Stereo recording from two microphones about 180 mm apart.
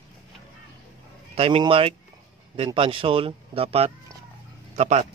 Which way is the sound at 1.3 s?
30° right (ahead or behind).